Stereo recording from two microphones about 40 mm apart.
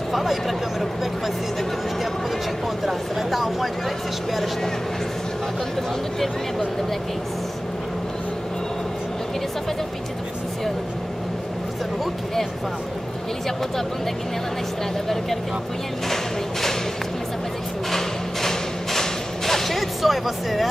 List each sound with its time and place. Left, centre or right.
0.1 s speech: centre
2.8 s speech: centre
17.9 s music: centre